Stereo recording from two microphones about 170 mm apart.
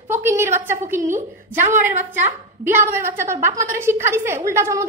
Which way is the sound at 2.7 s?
15° right (ahead or behind).